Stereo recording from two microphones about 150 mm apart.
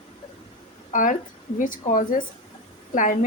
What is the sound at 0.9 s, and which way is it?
A woman's voice, 60° left (ahead or behind).